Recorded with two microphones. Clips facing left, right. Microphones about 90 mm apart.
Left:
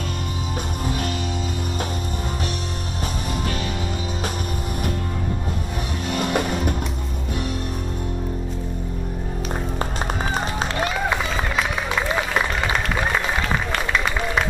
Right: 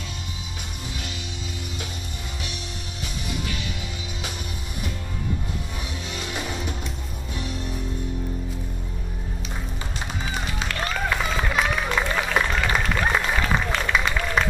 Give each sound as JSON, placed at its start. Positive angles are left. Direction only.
{"t": 6.0, "sound": "music", "side_deg": 55}
{"t": 10.2, "sound": "music", "side_deg": 40}
{"t": 10.9, "sound": "a sound", "side_deg": 15}
{"t": 13.3, "sound": "run", "side_deg": 0}